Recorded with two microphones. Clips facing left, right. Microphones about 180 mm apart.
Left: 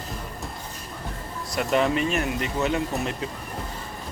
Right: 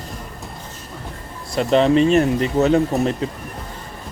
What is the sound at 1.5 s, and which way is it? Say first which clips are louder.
Speech: right 8 dB; 25° right (ahead or behind).